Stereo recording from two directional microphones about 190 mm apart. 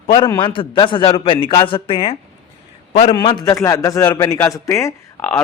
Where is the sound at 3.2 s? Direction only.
20° left (ahead or behind).